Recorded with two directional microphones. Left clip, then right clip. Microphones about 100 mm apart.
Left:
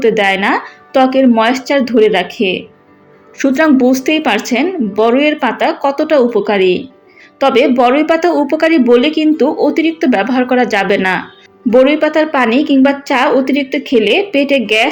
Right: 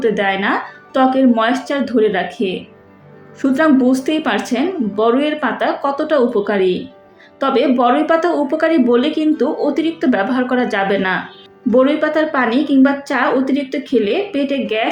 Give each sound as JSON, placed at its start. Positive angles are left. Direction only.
{"t": 0.0, "sound": "a woman's voice", "side_deg": 50}